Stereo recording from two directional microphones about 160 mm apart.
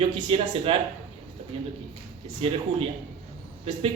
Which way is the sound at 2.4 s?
35° right (ahead or behind).